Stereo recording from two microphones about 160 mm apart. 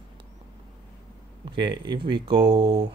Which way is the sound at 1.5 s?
30° right (ahead or behind).